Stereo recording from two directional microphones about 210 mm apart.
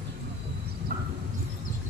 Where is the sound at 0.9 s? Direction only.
40° right (ahead or behind).